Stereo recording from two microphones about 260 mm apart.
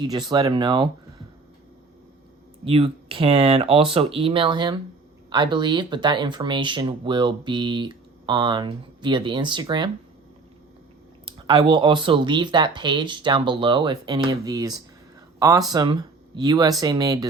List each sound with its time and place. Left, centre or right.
0.0 s speech: centre
2.6 s speech: right
11.3 s speech: centre